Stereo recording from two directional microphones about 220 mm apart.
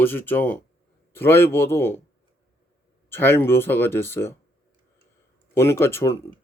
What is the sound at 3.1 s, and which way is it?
Speech, 10° left (ahead or behind).